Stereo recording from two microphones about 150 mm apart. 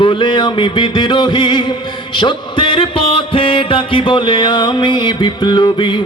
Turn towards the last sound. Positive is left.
turn(degrees=30)  # may be behind; listen again after turning